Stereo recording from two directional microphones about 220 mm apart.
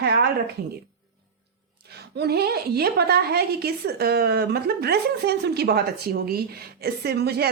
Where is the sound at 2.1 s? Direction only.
45° right (ahead or behind).